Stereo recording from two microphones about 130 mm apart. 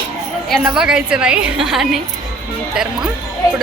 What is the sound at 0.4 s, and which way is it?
A woman's voice, centre (ahead or behind).